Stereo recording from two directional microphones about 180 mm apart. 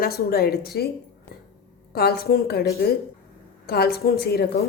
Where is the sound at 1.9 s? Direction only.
60° left (ahead or behind).